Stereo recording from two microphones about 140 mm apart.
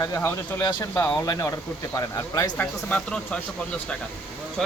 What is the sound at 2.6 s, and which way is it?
Speech, 10° left (ahead or behind).